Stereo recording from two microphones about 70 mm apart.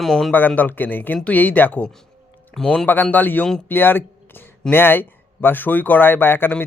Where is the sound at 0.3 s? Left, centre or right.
Left.